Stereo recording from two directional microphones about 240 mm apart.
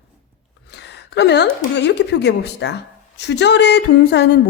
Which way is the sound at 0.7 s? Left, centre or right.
Left.